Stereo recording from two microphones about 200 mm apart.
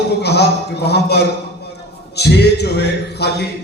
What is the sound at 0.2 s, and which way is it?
A man's voice, 55° left (ahead or behind).